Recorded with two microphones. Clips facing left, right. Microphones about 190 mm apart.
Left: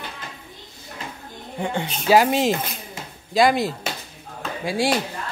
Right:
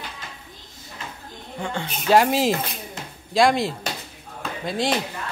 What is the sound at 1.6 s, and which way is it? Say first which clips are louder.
Speech: left 3 dB; 15° left (ahead or behind).